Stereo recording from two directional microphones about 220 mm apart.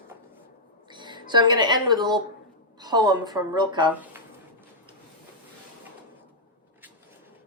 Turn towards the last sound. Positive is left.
turn(degrees=-10)  # may be behind; listen again after turning